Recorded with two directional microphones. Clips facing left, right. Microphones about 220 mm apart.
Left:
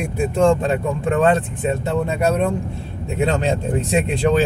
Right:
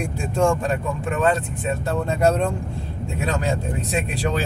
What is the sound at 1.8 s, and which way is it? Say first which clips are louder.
Speech: right 2 dB; 15° left (ahead or behind).